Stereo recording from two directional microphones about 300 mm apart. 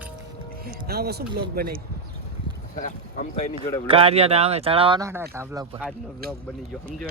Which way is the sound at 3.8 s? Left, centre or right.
Centre.